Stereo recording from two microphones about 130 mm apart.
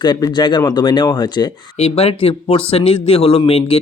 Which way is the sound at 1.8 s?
50° left (ahead or behind).